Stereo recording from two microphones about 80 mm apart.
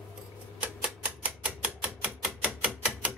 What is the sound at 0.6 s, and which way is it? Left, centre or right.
Typewriter, centre.